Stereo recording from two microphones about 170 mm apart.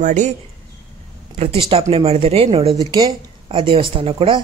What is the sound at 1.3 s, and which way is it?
Speech, 35° right (ahead or behind).